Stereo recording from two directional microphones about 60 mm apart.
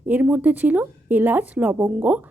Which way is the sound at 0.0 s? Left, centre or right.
Right.